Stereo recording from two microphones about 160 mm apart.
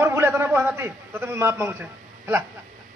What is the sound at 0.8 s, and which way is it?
A man's voice, 15° right (ahead or behind).